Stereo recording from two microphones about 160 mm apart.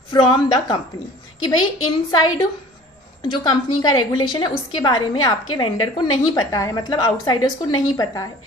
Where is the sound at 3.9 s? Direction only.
25° left (ahead or behind).